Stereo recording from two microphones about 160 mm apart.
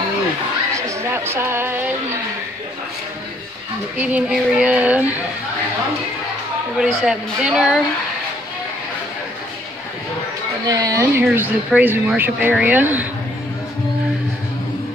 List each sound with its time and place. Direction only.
0.7 s a sound: 15° right (ahead or behind)
4.0 s speech: 5° right (ahead or behind)
6.8 s a woman's voice: 5° right (ahead or behind)
10.7 s speech: 20° right (ahead or behind)